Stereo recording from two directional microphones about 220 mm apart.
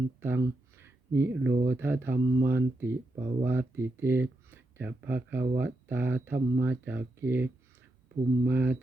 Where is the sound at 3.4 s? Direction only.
10° right (ahead or behind).